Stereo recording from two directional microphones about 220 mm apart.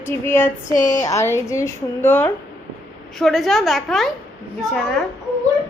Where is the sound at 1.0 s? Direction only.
10° left (ahead or behind).